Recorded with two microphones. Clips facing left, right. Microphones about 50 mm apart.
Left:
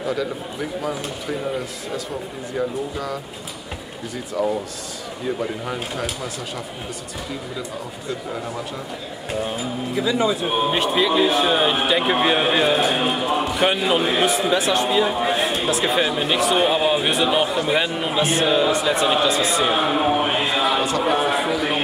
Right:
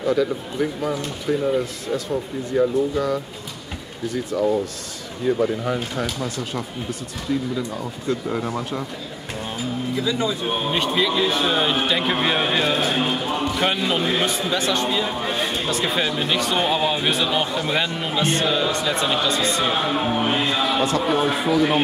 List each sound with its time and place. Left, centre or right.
0.0 s speech: centre
2.5 s speech: centre
4.3 s speech: centre
8.5 s speech: centre
10.0 s a man's voice: centre